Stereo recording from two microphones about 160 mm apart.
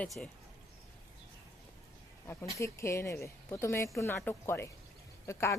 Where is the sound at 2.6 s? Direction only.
15° left (ahead or behind).